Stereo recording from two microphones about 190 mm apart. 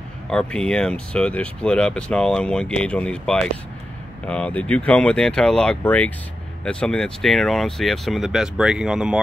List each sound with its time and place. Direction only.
0.3 s speech: 5° left (ahead or behind)